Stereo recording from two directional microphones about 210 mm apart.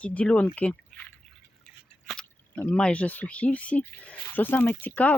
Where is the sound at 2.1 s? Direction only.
5° left (ahead or behind).